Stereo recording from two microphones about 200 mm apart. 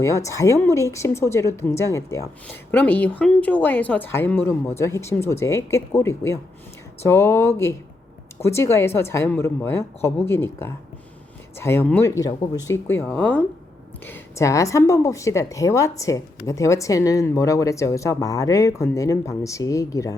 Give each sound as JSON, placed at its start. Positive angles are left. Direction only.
{"t": 0.0, "sound": "speech", "side_deg": 15}